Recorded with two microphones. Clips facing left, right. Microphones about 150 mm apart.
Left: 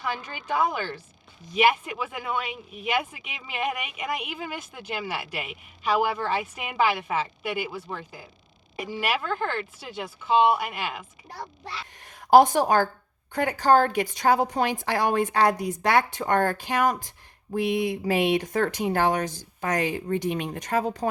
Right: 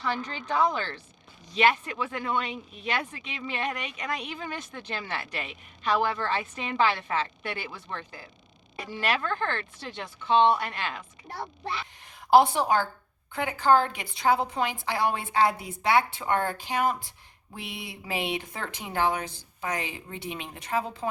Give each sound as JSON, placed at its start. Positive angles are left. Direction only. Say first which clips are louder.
{"t": 0.0, "sound": "speech", "louder": "right 1 dB", "side_deg": 10}
{"t": 12.0, "sound": "a woman's voice", "louder": "left 3 dB", "side_deg": 45}